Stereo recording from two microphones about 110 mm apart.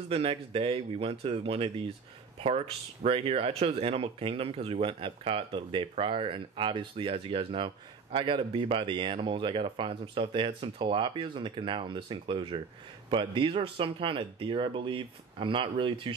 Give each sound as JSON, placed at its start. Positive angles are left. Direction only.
{"t": 0.1, "sound": "speech", "side_deg": -60}